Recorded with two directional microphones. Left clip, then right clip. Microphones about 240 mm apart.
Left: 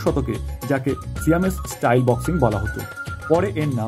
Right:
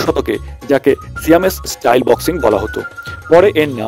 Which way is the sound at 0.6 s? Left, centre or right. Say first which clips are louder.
Right 11 dB; right.